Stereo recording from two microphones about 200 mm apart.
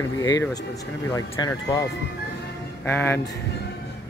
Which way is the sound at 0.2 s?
20° left (ahead or behind).